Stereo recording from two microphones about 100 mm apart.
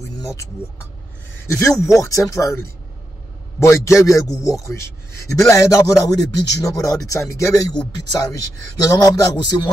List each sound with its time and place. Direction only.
1.5 s a man's voice: 30° left (ahead or behind)